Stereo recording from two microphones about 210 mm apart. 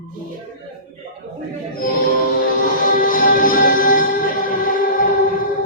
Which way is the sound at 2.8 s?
40° left (ahead or behind).